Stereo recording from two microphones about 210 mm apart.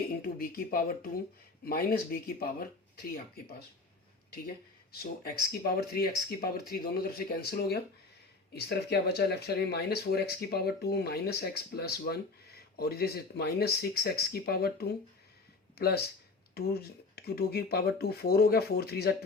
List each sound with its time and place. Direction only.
0.2 s speech: 45° left (ahead or behind)
4.9 s speech: 45° left (ahead or behind)